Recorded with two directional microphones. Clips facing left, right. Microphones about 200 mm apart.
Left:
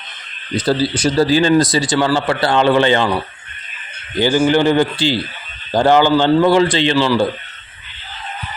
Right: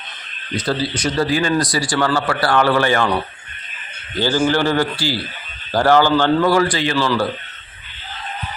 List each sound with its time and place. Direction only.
0.6 s speech: 30° left (ahead or behind)
4.2 s speech: 15° left (ahead or behind)
6.9 s speech: 10° left (ahead or behind)